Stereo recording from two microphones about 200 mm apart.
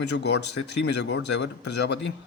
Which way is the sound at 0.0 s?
60° left (ahead or behind).